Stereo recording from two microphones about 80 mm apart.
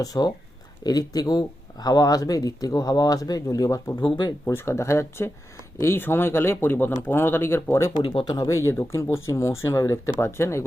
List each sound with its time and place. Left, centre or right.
0.0 s speech: left
4.4 s speech: left
7.9 s speech: left